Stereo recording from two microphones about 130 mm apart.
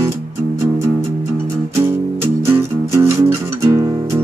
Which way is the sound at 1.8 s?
20° right (ahead or behind).